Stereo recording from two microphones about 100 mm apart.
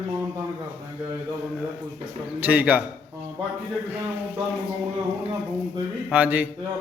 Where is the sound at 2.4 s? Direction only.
15° right (ahead or behind).